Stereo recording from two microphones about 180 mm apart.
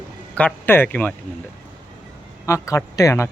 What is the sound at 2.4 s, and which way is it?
Speech, 15° left (ahead or behind).